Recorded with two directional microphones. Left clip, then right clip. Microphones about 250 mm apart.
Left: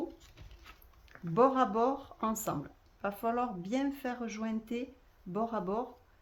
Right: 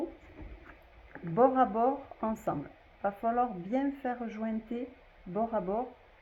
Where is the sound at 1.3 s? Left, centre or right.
Left.